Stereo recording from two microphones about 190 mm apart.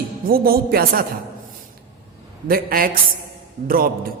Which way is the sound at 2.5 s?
50° right (ahead or behind).